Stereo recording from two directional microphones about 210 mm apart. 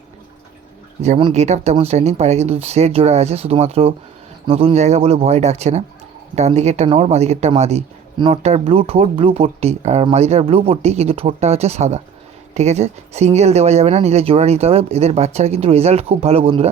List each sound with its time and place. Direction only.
1.2 s speech: 30° right (ahead or behind)